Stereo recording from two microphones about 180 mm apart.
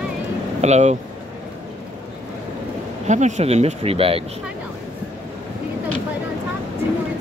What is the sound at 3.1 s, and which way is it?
Speech, 40° right (ahead or behind).